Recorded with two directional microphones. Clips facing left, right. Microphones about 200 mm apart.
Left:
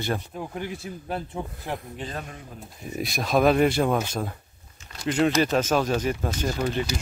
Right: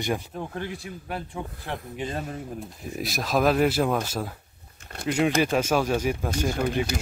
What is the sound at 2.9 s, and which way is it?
Speech, centre (ahead or behind).